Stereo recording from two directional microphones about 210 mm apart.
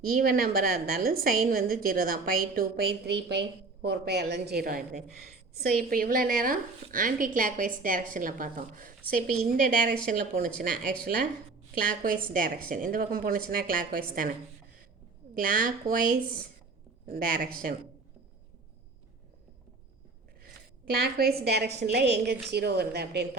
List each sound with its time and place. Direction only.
0.0 s a woman's voice: 45° right (ahead or behind)
11.7 s a woman's voice: 40° right (ahead or behind)
15.4 s a woman's voice: 40° right (ahead or behind)
21.0 s a woman's voice: 45° right (ahead or behind)